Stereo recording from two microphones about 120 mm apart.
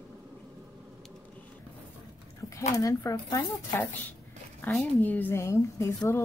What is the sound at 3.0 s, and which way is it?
Speech, 25° left (ahead or behind).